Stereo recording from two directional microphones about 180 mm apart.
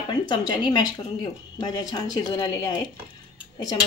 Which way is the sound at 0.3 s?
25° left (ahead or behind).